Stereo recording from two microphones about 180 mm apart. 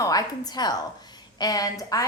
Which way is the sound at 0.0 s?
20° left (ahead or behind).